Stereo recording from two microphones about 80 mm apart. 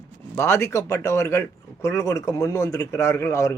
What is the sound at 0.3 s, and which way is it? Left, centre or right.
Speech, left.